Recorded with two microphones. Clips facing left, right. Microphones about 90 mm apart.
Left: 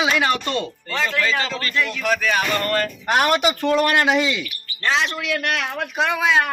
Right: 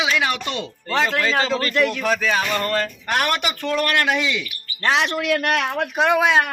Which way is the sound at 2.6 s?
20° right (ahead or behind).